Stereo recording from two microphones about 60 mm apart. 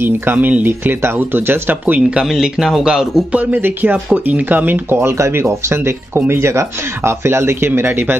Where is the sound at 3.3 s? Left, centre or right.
Right.